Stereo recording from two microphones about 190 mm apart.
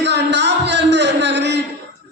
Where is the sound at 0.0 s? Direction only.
65° right (ahead or behind).